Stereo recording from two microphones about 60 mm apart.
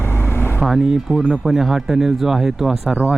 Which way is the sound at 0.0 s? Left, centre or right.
Left.